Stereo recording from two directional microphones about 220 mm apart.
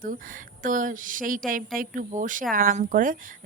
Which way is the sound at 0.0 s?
40° right (ahead or behind).